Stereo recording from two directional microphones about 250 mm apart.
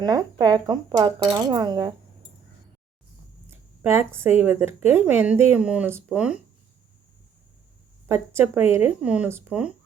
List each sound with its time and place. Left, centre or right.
0.0 s speech: centre
3.5 s a sound: centre
4.2 s speech: centre
8.0 s speech: centre